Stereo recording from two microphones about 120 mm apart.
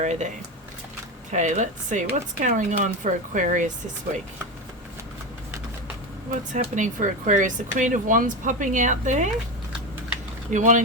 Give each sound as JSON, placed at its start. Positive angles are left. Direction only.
{"t": 0.0, "sound": "speech", "side_deg": -80}
{"t": 1.3, "sound": "speech", "side_deg": -85}
{"t": 6.5, "sound": "speech", "side_deg": -90}
{"t": 10.5, "sound": "speech", "side_deg": -90}